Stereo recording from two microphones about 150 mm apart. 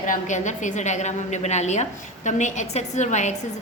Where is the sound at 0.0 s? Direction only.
55° left (ahead or behind).